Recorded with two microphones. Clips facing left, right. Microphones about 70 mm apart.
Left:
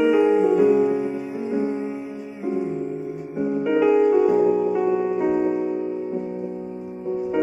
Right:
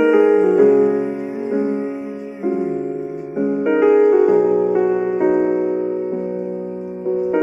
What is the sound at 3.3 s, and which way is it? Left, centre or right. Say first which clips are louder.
Music: right 5 dB; right.